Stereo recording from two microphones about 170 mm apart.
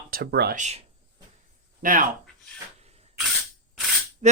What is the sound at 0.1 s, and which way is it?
Speech, 70° right (ahead or behind).